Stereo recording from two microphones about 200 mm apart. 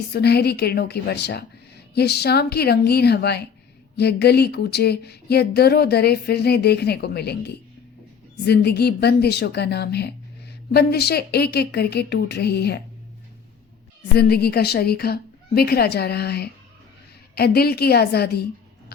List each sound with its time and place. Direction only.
0.1 s a woman's voice: 55° left (ahead or behind)
14.2 s a woman's voice: 50° left (ahead or behind)